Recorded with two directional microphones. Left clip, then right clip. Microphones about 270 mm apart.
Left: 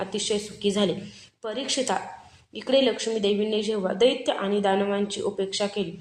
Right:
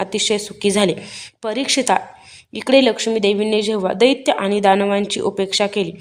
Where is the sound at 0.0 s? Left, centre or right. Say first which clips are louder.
Right 8 dB; right.